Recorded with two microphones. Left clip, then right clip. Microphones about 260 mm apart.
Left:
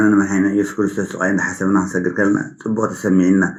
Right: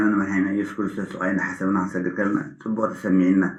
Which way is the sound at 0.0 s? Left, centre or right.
Left.